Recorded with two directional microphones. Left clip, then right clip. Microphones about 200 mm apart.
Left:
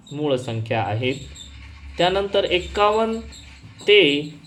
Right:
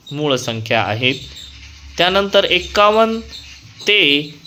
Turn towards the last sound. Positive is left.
turn(degrees=-35)  # may be behind; listen again after turning